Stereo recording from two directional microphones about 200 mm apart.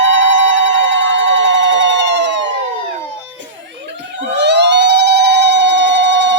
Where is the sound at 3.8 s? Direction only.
60° right (ahead or behind).